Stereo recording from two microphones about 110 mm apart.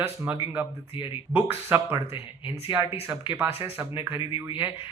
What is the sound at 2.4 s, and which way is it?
Speech, 50° left (ahead or behind).